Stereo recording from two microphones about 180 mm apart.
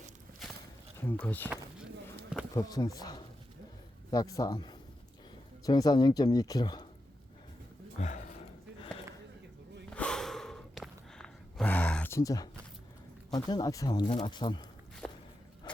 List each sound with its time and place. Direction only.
0.9 s speech: 10° left (ahead or behind)
2.6 s speech: 20° left (ahead or behind)
7.9 s speech: 40° left (ahead or behind)
9.9 s snort: 5° left (ahead or behind)
13.3 s speech: 20° left (ahead or behind)
15.0 s walk: 5° left (ahead or behind)